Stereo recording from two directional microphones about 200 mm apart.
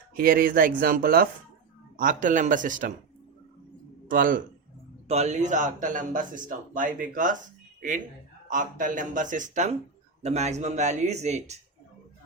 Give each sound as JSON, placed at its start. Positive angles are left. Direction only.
{"t": 0.2, "sound": "a man's voice", "side_deg": -45}
{"t": 4.1, "sound": "speech", "side_deg": -45}
{"t": 5.0, "sound": "a man's voice", "side_deg": -35}